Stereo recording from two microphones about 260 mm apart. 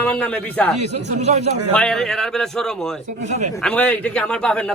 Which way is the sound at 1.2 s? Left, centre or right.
Right.